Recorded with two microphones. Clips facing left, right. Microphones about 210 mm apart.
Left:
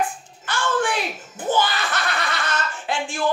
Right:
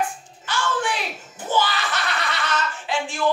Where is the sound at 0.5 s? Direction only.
55° left (ahead or behind).